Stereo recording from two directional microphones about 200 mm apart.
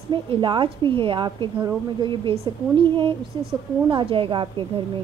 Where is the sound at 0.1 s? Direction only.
25° right (ahead or behind).